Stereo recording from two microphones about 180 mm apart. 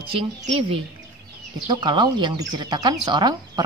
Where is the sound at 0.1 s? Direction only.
30° right (ahead or behind).